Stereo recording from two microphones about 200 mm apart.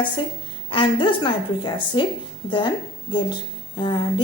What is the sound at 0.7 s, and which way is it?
A woman's voice, 25° left (ahead or behind).